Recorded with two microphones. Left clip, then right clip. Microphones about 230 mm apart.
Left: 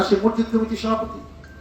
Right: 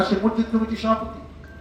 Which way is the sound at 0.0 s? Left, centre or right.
Left.